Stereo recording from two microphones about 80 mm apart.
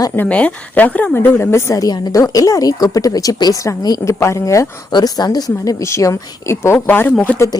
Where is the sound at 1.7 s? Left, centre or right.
Left.